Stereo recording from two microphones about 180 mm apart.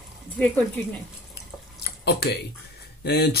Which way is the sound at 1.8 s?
65° left (ahead or behind).